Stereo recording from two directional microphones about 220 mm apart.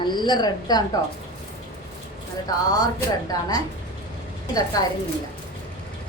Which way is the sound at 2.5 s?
15° left (ahead or behind).